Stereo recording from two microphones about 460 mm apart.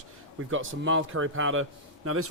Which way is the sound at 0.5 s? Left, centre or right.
Right.